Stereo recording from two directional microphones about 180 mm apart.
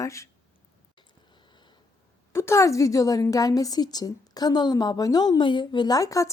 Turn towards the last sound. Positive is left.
turn(degrees=20)  # may be behind; listen again after turning